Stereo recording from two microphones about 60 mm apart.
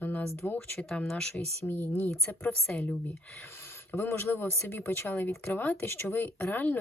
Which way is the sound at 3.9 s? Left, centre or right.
Left.